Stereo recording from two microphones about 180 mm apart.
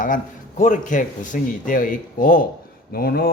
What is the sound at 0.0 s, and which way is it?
A man's voice, 45° left (ahead or behind).